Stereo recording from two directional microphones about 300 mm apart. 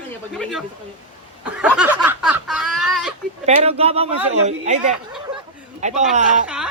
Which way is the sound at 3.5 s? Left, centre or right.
Centre.